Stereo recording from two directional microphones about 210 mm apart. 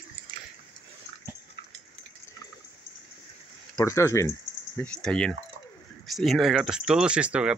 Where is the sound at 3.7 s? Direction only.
15° left (ahead or behind); by 7.5 s 5° right (ahead or behind).